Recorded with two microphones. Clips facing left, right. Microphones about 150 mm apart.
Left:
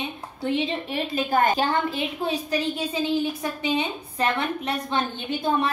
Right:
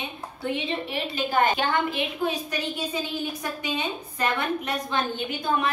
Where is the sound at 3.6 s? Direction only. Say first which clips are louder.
Left 6 dB; 25° left (ahead or behind).